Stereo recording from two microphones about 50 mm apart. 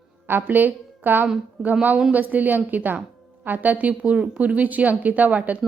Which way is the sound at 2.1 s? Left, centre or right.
Right.